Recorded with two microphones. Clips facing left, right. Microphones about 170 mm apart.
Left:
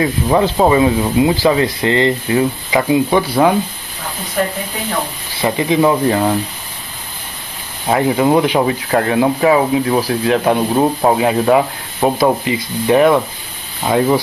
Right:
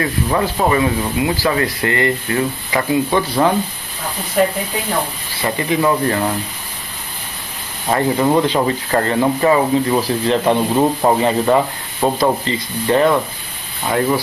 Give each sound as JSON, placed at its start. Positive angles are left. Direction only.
{"t": 0.0, "sound": "sanding", "side_deg": 20}
{"t": 5.4, "sound": "speech", "side_deg": 15}
{"t": 7.9, "sound": "speech", "side_deg": 10}